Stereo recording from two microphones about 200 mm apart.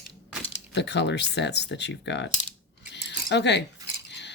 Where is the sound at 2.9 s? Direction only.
60° left (ahead or behind).